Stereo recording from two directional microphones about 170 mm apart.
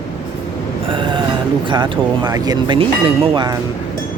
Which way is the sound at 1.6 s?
30° right (ahead or behind).